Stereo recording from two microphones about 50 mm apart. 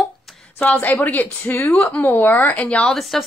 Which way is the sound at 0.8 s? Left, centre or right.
Left.